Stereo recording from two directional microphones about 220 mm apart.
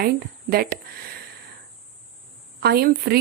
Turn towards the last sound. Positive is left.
turn(degrees=-45)  # may be behind; listen again after turning